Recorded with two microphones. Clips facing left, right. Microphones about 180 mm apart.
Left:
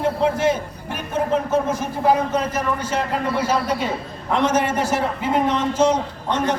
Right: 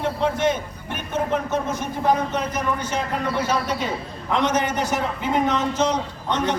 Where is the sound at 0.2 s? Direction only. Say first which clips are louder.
Left 2 dB; 5° left (ahead or behind).